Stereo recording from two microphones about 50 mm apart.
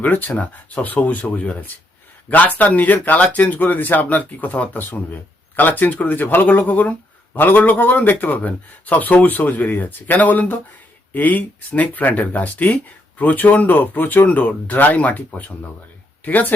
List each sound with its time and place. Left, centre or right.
0.0 s speech: left